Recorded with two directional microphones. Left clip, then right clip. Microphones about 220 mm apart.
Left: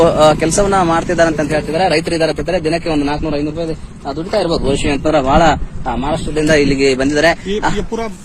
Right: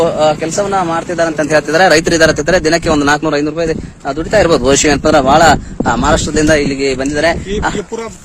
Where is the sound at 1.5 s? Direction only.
30° right (ahead or behind).